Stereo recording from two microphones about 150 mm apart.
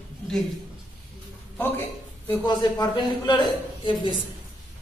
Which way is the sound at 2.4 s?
30° left (ahead or behind).